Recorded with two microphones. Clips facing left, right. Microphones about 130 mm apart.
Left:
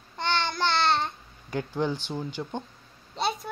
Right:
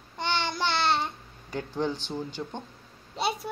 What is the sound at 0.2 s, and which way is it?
Child singing, 10° right (ahead or behind).